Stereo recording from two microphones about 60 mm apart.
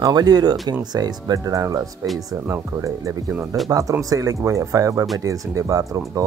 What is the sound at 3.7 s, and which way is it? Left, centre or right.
Speech, right.